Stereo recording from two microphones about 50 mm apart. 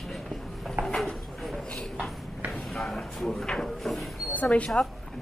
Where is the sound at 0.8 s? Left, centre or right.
Centre.